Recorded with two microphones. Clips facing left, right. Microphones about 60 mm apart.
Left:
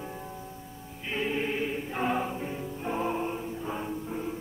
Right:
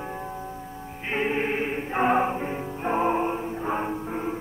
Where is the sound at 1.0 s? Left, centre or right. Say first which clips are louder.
Right 5 dB; right.